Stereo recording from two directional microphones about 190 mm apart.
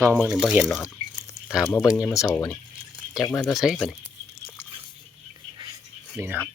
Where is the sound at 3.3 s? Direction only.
Centre (ahead or behind).